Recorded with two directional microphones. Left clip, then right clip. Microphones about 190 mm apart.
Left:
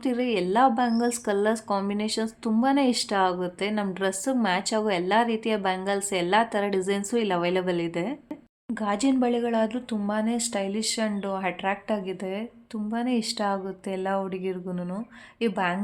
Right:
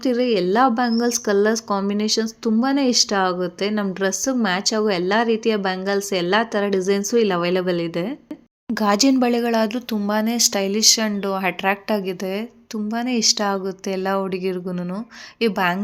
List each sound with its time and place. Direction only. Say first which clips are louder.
0.0 s speech: right 7 dB; 20° right (ahead or behind)